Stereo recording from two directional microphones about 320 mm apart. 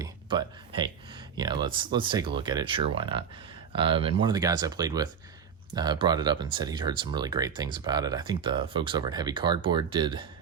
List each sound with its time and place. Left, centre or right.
0.0 s speech: centre